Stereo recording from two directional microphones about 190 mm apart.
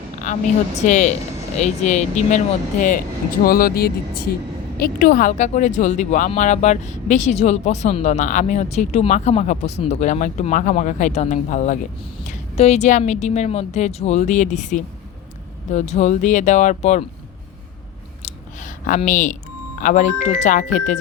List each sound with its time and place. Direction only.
0.3 s speech: 40° left (ahead or behind)
18.2 s a sound: 40° left (ahead or behind)
19.8 s speech: 40° left (ahead or behind)